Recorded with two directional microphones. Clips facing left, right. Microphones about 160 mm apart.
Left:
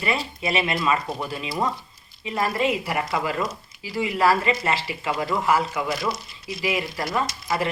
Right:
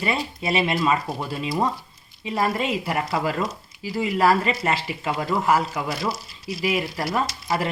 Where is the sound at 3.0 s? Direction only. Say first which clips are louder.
Right 1 dB; 35° right (ahead or behind).